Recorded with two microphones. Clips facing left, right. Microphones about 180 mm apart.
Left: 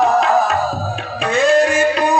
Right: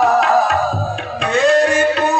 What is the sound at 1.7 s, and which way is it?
Music, 15° left (ahead or behind).